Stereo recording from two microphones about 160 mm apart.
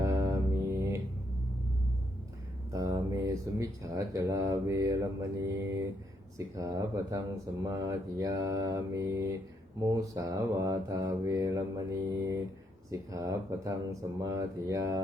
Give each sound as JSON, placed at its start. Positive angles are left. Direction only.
{"t": 0.0, "sound": "mantra", "side_deg": -20}
{"t": 2.7, "sound": "speech", "side_deg": -20}